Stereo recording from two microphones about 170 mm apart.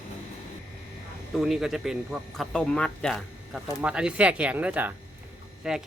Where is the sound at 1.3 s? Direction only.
Centre (ahead or behind).